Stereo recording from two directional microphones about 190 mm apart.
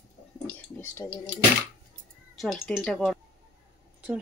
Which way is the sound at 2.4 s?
Centre (ahead or behind).